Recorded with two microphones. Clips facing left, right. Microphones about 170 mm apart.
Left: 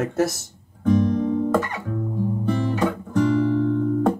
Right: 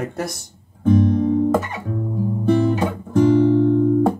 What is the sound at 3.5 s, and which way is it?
Music, 30° right (ahead or behind).